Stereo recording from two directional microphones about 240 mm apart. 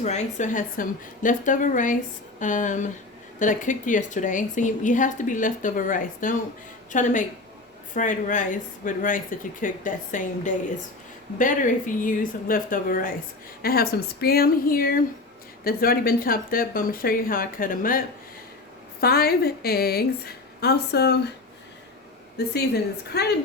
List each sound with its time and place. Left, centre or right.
0.0 s a woman's voice: left
22.4 s a woman's voice: left